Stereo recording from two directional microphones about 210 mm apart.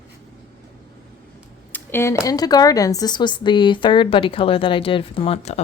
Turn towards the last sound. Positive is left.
turn(degrees=30)  # may be behind; listen again after turning